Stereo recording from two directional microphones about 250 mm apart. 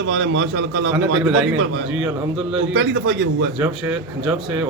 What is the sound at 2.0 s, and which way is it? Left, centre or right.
Speech, centre.